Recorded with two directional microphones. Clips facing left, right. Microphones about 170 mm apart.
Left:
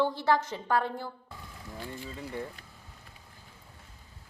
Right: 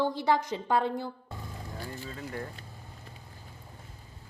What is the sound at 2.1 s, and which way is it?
Speech, 15° left (ahead or behind).